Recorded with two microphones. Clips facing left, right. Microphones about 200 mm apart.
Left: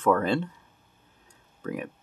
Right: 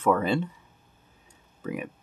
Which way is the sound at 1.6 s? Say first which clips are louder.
Even; 10° right (ahead or behind).